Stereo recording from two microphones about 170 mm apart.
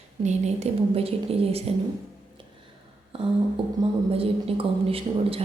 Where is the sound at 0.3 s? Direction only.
40° right (ahead or behind).